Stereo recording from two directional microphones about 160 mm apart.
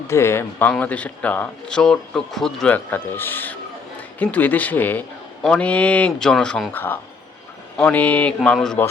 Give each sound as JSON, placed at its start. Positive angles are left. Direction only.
{"t": 0.1, "sound": "a man's voice", "side_deg": 15}